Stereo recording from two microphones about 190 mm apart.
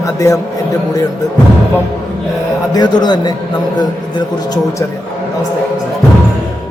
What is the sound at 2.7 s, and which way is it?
Speech, 20° left (ahead or behind).